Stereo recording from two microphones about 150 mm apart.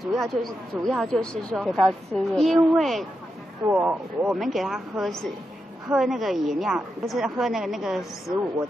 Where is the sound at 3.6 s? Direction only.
10° right (ahead or behind).